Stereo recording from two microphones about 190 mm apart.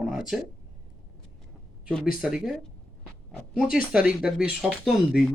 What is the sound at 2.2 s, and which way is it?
A man's voice, 5° right (ahead or behind).